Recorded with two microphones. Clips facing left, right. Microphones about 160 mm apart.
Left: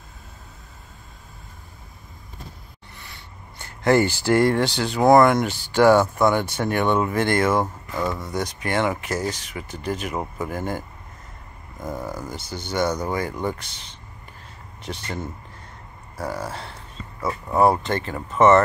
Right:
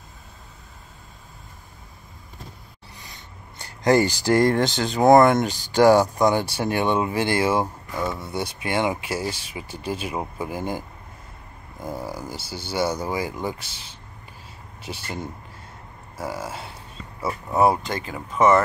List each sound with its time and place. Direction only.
3.0 s a sound: 35° right (ahead or behind)
4.8 s speech: 25° right (ahead or behind)
5.5 s speech: 40° right (ahead or behind)
7.2 s speech: 10° right (ahead or behind)
8.1 s speech: 25° right (ahead or behind)
8.4 s speech: 15° right (ahead or behind)
11.8 s speech: 10° right (ahead or behind)
17.5 s speech: 5° right (ahead or behind)